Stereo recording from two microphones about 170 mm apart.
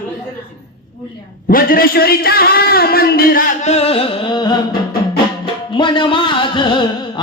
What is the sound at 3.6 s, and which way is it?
Music, 40° left (ahead or behind).